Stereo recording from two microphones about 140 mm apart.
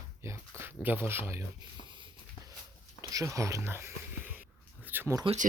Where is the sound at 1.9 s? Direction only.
35° right (ahead or behind).